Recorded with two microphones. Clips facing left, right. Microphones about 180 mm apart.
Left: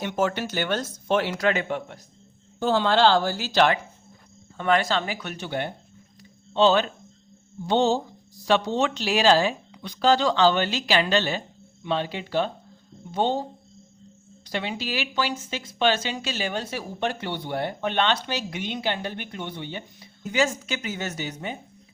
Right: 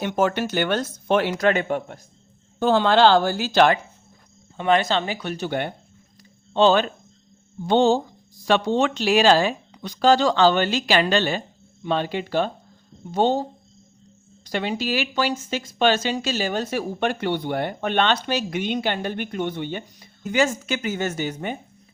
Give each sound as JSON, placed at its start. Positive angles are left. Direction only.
{"t": 0.0, "sound": "speech", "side_deg": -55}
{"t": 2.6, "sound": "speech", "side_deg": -60}
{"t": 4.5, "sound": "speech", "side_deg": -20}
{"t": 5.5, "sound": "speech", "side_deg": -60}
{"t": 9.7, "sound": "speech", "side_deg": -45}
{"t": 14.4, "sound": "speech", "side_deg": -45}